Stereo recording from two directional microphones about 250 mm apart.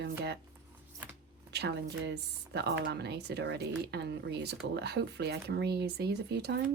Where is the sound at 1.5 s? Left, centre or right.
Right.